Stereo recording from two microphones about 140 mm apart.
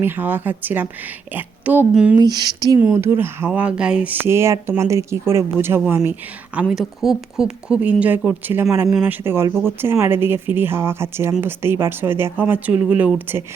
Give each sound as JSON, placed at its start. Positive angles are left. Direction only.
{"t": 0.0, "sound": "speech", "side_deg": -15}
{"t": 2.1, "sound": "speech", "side_deg": -30}